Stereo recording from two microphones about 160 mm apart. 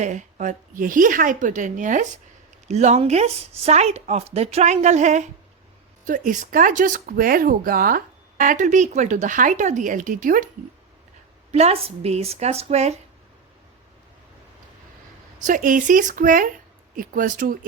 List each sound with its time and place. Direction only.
0.0 s speech: 50° right (ahead or behind)
11.5 s a woman's voice: 40° right (ahead or behind)
15.4 s speech: 55° right (ahead or behind)